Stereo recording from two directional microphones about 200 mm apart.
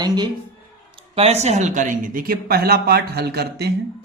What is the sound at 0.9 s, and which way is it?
Speech, 30° right (ahead or behind).